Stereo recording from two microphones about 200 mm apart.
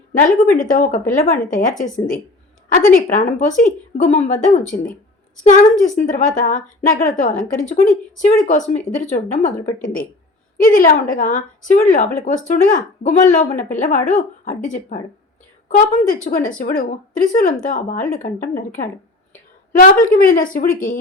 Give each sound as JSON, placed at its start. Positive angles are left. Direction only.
{"t": 0.5, "sound": "a woman's voice", "side_deg": 40}
{"t": 2.7, "sound": "a woman's voice", "side_deg": 40}
{"t": 19.7, "sound": "a woman's voice", "side_deg": 45}